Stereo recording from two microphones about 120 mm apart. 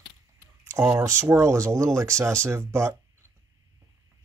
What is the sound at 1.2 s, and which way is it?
Speech, 25° right (ahead or behind).